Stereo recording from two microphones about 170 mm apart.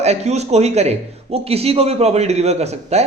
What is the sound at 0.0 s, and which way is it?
A man's voice, 40° right (ahead or behind).